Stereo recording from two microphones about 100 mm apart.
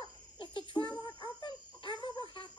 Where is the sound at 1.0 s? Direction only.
50° left (ahead or behind).